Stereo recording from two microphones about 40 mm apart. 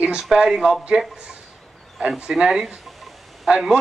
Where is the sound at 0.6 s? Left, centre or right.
Centre.